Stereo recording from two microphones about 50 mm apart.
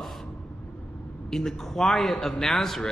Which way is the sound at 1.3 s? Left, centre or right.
Centre.